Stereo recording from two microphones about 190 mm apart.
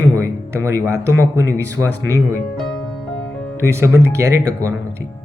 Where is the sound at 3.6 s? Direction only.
15° right (ahead or behind).